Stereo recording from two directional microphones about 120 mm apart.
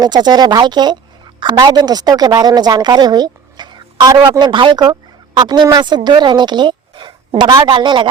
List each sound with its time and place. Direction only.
0.0 s a woman's voice: 35° right (ahead or behind)